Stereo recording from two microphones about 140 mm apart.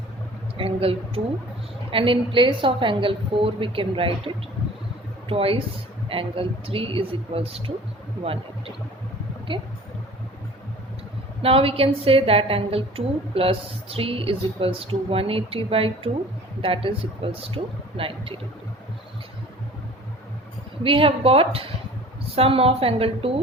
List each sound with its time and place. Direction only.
0.5 s a woman's voice: 40° right (ahead or behind)
11.4 s a woman's voice: 40° right (ahead or behind)
20.8 s a woman's voice: 40° right (ahead or behind)